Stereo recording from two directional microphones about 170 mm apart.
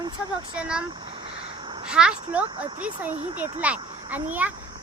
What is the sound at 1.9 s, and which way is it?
Speech, 5° right (ahead or behind).